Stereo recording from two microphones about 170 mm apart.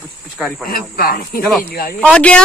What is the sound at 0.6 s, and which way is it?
Speech, 60° left (ahead or behind).